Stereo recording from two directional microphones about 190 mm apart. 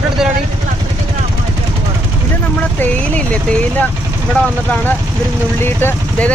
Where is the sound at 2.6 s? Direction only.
5° left (ahead or behind).